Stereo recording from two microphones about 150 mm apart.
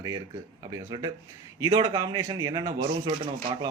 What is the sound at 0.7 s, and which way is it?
Speech, 25° right (ahead or behind).